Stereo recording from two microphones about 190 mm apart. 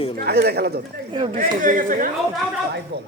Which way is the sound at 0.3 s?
60° right (ahead or behind).